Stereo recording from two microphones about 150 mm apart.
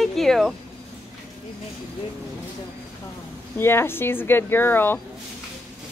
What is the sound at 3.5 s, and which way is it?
Speech, 15° left (ahead or behind).